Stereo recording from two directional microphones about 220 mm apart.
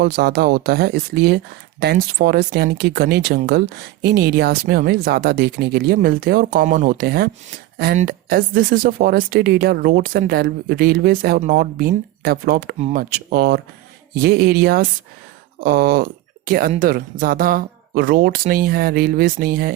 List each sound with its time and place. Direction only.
0.0 s speech: 45° right (ahead or behind)